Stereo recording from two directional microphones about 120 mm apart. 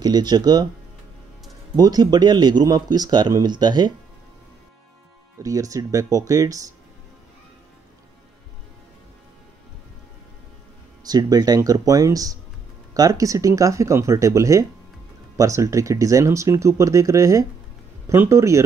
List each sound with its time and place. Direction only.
0.0 s speech: 35° right (ahead or behind)
1.8 s speech: 35° right (ahead or behind)
5.4 s speech: 30° right (ahead or behind)
11.1 s speech: 35° right (ahead or behind)